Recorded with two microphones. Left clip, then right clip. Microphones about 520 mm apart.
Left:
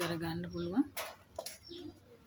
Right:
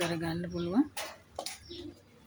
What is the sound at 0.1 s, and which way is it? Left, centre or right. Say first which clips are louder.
Speech: right 4 dB; left.